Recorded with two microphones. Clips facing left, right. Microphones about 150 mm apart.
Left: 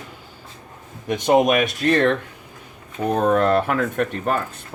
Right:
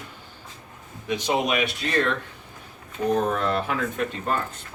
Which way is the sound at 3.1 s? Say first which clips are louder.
Left 10 dB; 60° left (ahead or behind).